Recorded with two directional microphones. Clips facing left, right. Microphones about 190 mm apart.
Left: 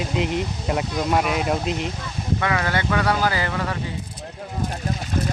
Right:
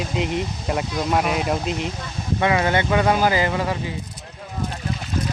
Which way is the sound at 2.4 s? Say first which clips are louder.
Right 5 dB; 20° right (ahead or behind).